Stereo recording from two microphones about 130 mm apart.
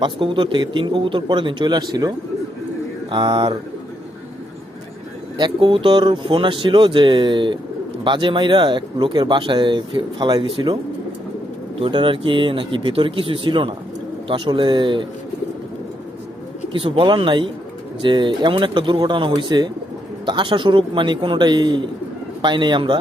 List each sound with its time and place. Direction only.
0.0 s speech: 40° right (ahead or behind)
5.4 s speech: 40° right (ahead or behind)
11.8 s speech: 40° right (ahead or behind)
16.8 s speech: 40° right (ahead or behind)